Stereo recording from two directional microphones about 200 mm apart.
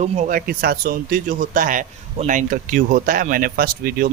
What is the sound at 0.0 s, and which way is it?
Speech, 40° right (ahead or behind).